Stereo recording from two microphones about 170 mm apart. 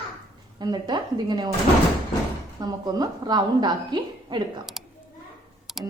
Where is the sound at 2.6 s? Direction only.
25° right (ahead or behind).